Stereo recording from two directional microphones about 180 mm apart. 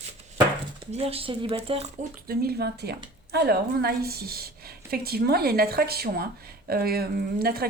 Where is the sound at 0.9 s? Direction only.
35° right (ahead or behind).